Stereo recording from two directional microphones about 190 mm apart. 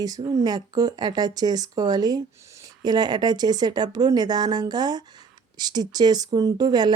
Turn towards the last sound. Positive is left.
turn(degrees=-20)  # may be behind; listen again after turning